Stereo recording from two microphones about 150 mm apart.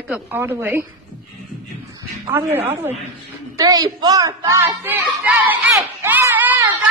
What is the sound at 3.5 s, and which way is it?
Speech, 25° right (ahead or behind).